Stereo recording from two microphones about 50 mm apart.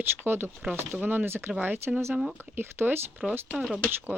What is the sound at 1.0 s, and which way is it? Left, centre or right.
Speech, right.